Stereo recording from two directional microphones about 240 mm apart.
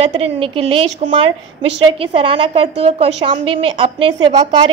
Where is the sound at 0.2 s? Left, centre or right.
Right.